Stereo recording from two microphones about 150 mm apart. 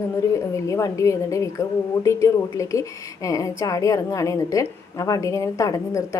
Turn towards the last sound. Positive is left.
turn(degrees=20)  # may be behind; listen again after turning